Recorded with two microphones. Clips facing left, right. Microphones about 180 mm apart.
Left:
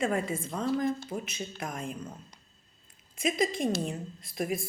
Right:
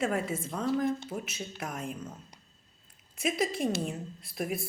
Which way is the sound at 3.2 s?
5° right (ahead or behind).